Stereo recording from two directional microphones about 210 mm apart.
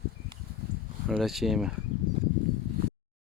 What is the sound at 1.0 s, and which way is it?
Speech, centre (ahead or behind).